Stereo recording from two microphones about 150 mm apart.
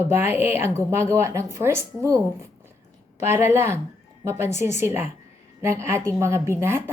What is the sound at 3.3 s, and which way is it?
A woman's voice, 15° right (ahead or behind).